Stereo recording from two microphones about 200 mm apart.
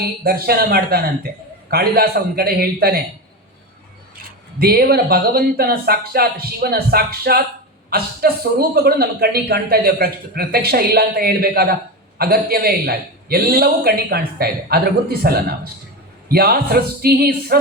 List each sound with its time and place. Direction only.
0.3 s a man's voice: 50° right (ahead or behind)
4.2 s a man's voice: 50° right (ahead or behind)